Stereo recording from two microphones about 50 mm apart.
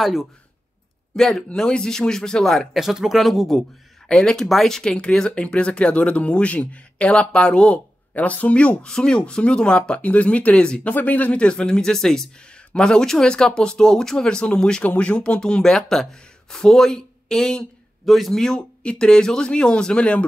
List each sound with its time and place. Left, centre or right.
0.0 s speech: centre
1.1 s speech: centre
2.7 s speech: centre
4.1 s speech: centre
4.5 s speech: centre
18.0 s speech: centre
18.8 s speech: centre